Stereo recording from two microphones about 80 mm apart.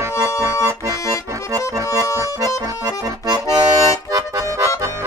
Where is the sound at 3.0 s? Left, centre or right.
Right.